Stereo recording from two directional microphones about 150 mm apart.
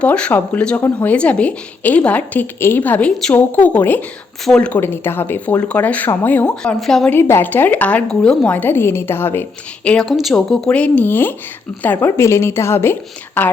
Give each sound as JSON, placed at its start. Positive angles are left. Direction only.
{"t": 0.0, "sound": "a woman's voice", "side_deg": 10}
{"t": 7.1, "sound": "a woman's voice", "side_deg": 15}